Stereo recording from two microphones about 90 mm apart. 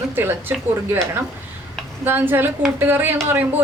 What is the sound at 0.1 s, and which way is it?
Speech, 25° right (ahead or behind).